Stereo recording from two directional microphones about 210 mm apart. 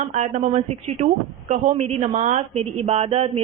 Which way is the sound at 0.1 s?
35° right (ahead or behind).